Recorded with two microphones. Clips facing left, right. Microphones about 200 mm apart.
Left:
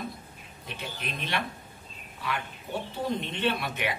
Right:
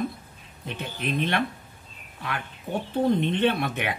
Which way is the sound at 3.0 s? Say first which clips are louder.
Right 7 dB; 55° right (ahead or behind).